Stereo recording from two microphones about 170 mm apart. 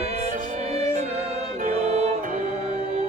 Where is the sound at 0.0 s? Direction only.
35° right (ahead or behind).